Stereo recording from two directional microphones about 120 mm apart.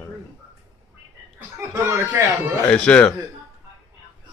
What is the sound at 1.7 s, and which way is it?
Speech, 25° right (ahead or behind).